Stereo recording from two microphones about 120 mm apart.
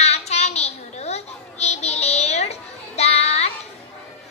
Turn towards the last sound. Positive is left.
turn(degrees=65)  # may be behind; listen again after turning